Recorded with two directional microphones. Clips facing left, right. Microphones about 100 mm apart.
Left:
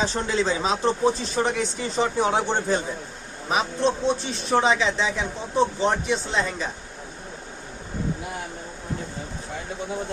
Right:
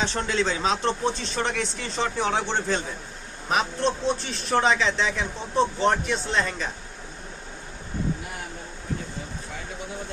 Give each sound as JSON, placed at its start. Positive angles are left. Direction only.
{"t": 0.0, "sound": "speech", "side_deg": 5}
{"t": 3.8, "sound": "speech", "side_deg": 0}